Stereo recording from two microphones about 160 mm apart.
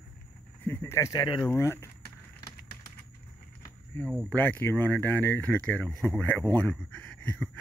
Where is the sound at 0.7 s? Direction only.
15° left (ahead or behind).